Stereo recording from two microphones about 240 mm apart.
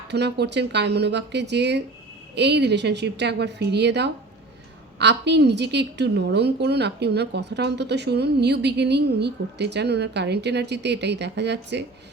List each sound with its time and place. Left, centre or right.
0.1 s a woman's voice: right